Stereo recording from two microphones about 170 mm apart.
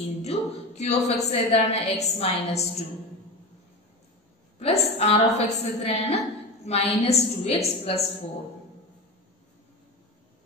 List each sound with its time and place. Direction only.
0.2 s a woman's voice: 40° left (ahead or behind)
4.6 s a woman's voice: 35° left (ahead or behind)